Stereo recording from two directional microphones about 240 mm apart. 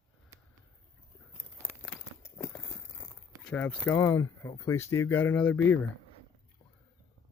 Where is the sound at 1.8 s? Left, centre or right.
Centre.